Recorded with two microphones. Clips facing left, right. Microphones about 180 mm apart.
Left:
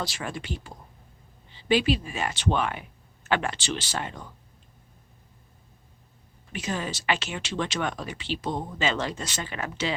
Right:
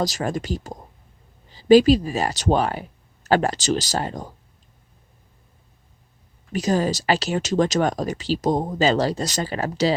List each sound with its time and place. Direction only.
0.0 s speech: 40° right (ahead or behind)
6.5 s speech: 40° right (ahead or behind)